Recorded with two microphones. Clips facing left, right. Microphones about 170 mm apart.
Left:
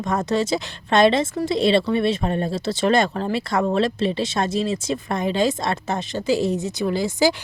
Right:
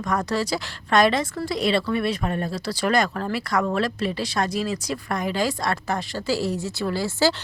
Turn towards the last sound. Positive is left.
turn(degrees=20)  # may be behind; listen again after turning